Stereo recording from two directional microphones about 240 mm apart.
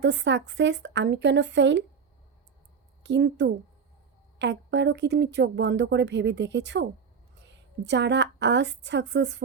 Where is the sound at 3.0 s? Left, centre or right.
Right.